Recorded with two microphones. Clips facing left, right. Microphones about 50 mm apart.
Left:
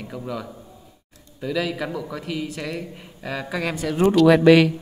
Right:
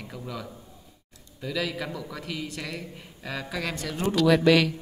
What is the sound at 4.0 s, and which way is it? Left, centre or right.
Speech, left.